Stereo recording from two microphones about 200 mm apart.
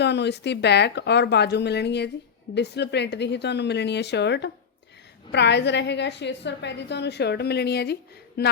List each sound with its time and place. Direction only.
0.0 s a woman's voice: 60° left (ahead or behind)